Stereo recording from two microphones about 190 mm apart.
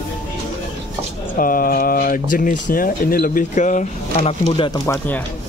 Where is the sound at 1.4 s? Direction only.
50° left (ahead or behind).